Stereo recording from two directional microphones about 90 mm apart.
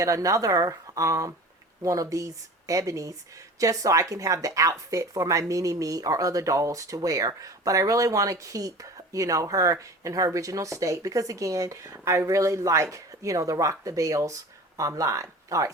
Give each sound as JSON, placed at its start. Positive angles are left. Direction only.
{"t": 0.0, "sound": "speech", "side_deg": -40}